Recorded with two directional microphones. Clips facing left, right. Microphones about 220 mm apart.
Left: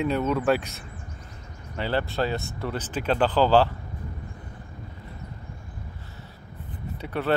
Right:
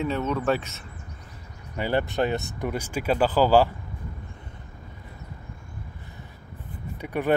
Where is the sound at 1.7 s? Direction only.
15° right (ahead or behind).